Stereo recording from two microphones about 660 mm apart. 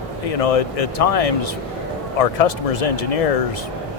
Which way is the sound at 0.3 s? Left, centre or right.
Left.